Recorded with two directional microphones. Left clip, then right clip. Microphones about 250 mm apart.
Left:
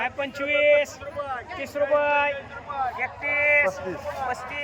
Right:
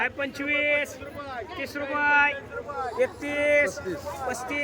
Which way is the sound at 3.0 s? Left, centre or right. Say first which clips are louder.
Even; right.